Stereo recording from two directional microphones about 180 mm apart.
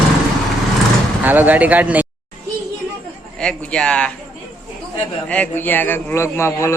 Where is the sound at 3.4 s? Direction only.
5° left (ahead or behind).